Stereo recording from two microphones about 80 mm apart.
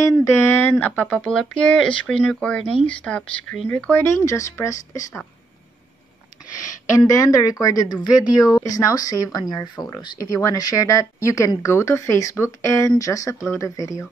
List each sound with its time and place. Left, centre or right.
0.0 s speech: left
1.2 s speech: centre
4.0 s speech: left
7.1 s speech: left
10.1 s speech: left